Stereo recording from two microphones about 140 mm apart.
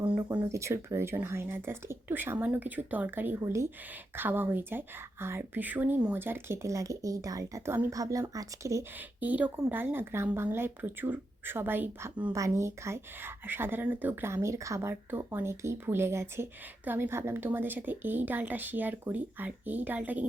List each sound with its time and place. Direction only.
0.3 s speech: 20° right (ahead or behind)